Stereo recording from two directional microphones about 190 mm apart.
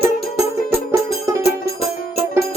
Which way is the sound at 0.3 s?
15° right (ahead or behind).